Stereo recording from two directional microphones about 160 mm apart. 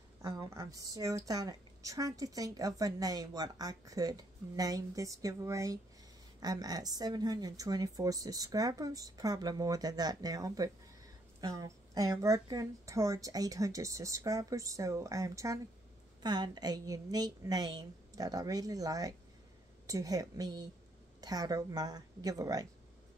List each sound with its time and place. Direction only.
0.2 s a woman's voice: 20° right (ahead or behind)